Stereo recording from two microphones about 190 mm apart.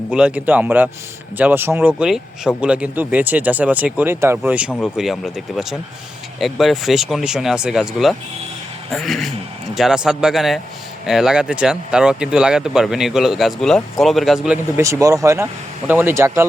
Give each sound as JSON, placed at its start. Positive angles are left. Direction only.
{"t": 0.1, "sound": "speech", "side_deg": -5}
{"t": 14.8, "sound": "speech", "side_deg": -15}